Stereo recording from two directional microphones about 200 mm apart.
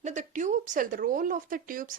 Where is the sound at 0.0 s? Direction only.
40° right (ahead or behind).